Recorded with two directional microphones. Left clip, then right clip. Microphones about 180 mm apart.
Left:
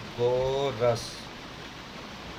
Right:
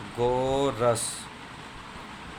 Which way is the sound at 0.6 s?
35° right (ahead or behind).